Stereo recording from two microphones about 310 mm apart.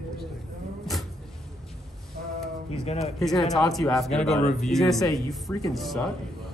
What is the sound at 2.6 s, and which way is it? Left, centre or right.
Speech, centre.